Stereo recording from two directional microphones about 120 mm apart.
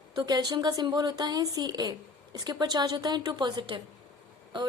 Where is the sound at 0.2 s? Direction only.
35° right (ahead or behind).